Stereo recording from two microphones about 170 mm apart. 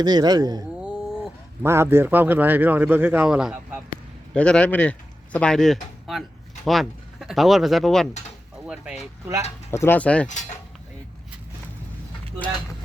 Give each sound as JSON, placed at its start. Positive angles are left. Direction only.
{"t": 0.0, "sound": "speech", "side_deg": -25}
{"t": 0.8, "sound": "a sound", "side_deg": -5}
{"t": 1.6, "sound": "a man's voice", "side_deg": -15}
{"t": 4.4, "sound": "speech", "side_deg": 5}
{"t": 9.7, "sound": "speech", "side_deg": 15}